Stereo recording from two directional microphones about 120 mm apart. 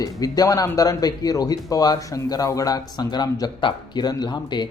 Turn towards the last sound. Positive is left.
turn(degrees=35)  # may be behind; listen again after turning